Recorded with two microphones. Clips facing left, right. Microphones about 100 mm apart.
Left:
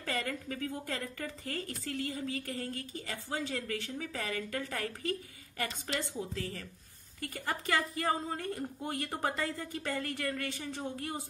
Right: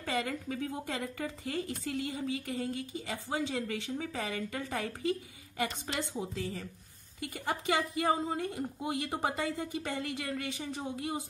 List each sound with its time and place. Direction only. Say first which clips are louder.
0.0 s a woman's voice: right 2 dB; 15° right (ahead or behind)